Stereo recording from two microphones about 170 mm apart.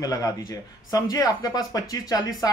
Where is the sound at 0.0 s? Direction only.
20° left (ahead or behind).